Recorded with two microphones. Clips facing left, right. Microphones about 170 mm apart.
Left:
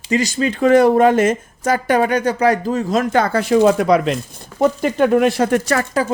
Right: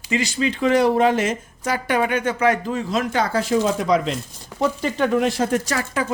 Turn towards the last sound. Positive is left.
turn(degrees=60)  # may be behind; listen again after turning